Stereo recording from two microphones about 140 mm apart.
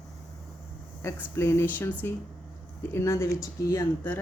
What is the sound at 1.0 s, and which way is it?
Speech, 20° left (ahead or behind).